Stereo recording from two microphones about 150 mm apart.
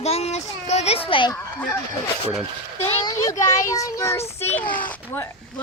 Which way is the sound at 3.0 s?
25° left (ahead or behind).